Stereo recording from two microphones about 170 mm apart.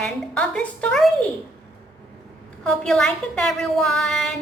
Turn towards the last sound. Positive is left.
turn(degrees=0)  # may be behind; listen again after turning